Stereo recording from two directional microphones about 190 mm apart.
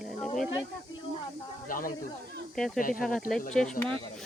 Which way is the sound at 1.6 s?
45° left (ahead or behind).